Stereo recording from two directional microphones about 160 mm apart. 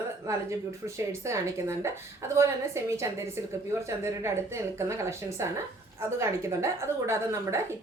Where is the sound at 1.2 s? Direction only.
15° right (ahead or behind).